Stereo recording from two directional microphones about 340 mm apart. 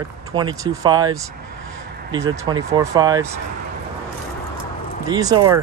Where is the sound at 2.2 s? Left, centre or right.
Centre.